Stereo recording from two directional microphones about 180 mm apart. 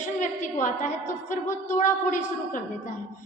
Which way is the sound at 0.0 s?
45° left (ahead or behind).